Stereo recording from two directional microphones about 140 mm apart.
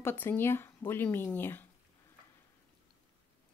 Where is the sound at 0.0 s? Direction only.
15° left (ahead or behind).